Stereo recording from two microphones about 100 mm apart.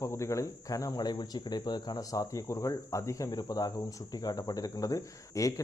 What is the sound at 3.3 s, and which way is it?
Speech, 40° left (ahead or behind).